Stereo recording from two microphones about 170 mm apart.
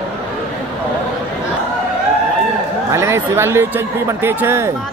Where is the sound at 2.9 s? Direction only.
15° right (ahead or behind).